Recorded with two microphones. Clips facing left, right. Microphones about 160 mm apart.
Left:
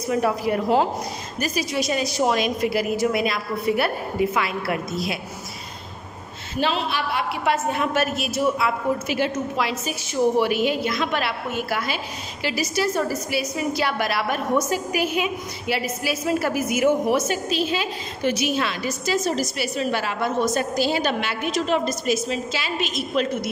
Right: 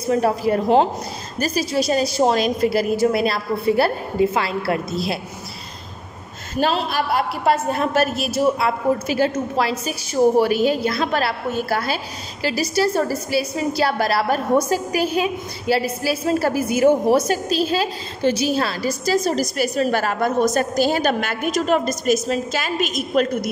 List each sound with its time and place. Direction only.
0.0 s a woman's voice: 35° right (ahead or behind)
6.5 s a woman's voice: 45° right (ahead or behind)